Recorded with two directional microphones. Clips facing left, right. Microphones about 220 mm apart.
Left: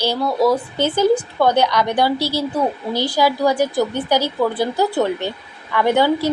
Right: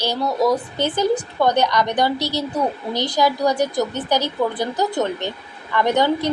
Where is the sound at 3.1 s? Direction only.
5° left (ahead or behind).